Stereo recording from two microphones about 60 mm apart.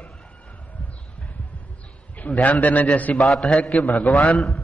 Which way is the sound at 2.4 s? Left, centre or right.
Centre.